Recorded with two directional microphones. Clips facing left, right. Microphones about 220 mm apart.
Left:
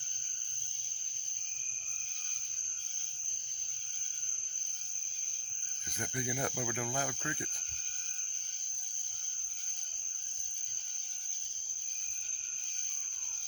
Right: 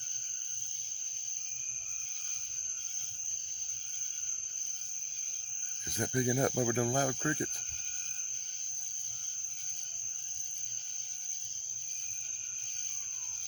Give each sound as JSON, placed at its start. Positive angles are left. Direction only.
{"t": 6.0, "sound": "cricket", "side_deg": -35}